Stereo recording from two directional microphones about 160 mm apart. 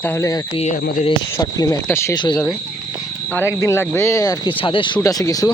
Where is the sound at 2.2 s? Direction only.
25° left (ahead or behind).